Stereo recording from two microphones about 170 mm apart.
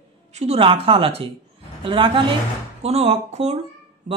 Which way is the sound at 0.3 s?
40° right (ahead or behind).